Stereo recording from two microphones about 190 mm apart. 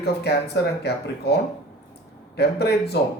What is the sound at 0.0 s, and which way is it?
Speech, 60° left (ahead or behind).